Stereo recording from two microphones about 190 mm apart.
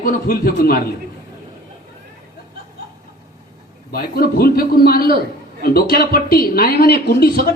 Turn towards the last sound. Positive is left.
turn(degrees=55)  # may be behind; listen again after turning